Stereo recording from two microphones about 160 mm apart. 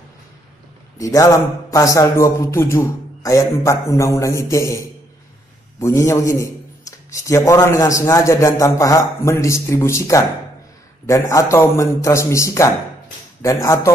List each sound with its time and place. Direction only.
0.9 s a man's voice: 20° left (ahead or behind)
5.8 s a man's voice: 20° left (ahead or behind)